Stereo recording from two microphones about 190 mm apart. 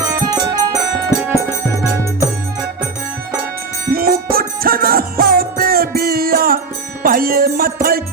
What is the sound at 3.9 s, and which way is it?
Music, 50° right (ahead or behind).